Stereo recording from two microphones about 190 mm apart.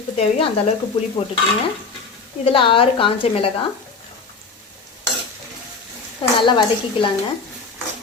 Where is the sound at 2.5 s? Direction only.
25° left (ahead or behind).